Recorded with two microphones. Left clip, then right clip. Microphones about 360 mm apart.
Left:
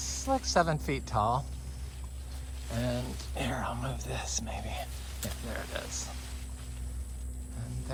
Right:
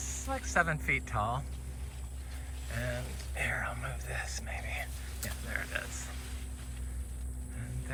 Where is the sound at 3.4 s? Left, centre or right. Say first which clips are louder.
Even; left.